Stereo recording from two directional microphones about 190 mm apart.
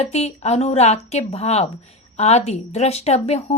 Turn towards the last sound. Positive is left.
turn(degrees=35)  # may be behind; listen again after turning